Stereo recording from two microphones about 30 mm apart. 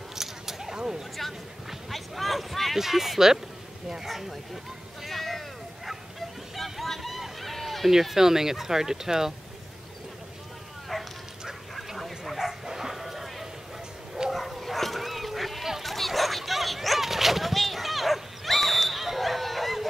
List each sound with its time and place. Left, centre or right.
0.1 s a sound: centre
1.9 s a sound: centre
2.8 s speech: centre
5.0 s a sound: centre
8.0 s speech: centre
10.9 s bow-wow: centre
12.4 s bow-wow: centre
14.3 s dog: centre
15.8 s bow-wow: centre